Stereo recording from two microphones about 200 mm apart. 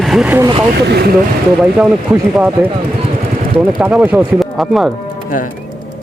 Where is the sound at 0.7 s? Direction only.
55° right (ahead or behind).